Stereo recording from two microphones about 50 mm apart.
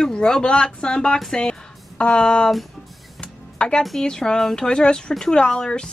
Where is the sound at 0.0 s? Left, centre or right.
Centre.